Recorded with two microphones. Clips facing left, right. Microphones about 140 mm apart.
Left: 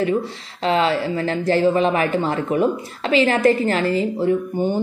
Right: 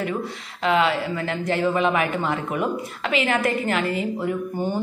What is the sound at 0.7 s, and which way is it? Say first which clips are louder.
A woman's voice: left 2 dB; 35° left (ahead or behind).